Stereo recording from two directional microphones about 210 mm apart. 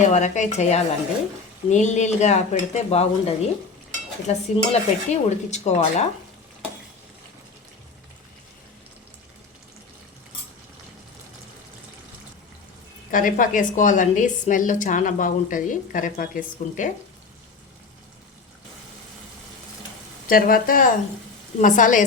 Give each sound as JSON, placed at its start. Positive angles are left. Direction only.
{"t": 0.1, "sound": "a woman's voice", "side_deg": 35}
{"t": 13.1, "sound": "a woman's voice", "side_deg": 40}
{"t": 20.2, "sound": "a woman's voice", "side_deg": 45}